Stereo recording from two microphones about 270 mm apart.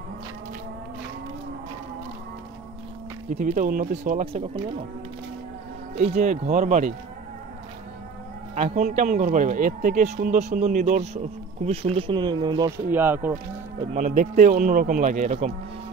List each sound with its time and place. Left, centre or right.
3.3 s speech: right
5.9 s speech: right
8.5 s speech: right; by 13.8 s centre
13.9 s speech: right